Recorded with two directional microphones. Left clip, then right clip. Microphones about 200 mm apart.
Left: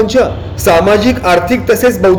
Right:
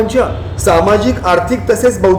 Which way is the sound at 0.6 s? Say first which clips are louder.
Left 2 dB; 20° left (ahead or behind).